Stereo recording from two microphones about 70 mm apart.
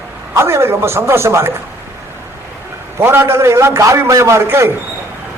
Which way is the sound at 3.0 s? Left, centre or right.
Right.